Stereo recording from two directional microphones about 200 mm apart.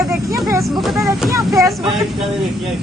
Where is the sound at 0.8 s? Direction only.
Centre (ahead or behind).